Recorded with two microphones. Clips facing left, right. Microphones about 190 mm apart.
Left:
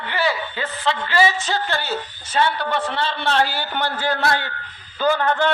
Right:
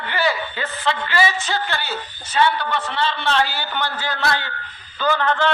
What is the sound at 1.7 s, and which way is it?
A man's voice, 45° left (ahead or behind).